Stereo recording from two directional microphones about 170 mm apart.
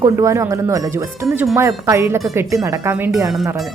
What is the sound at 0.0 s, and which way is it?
Speech, 15° right (ahead or behind).